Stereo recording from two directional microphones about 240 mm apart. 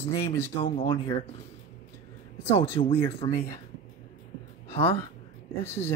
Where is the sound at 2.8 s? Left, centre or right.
Left.